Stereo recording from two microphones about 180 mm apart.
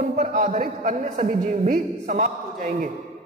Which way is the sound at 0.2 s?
40° right (ahead or behind).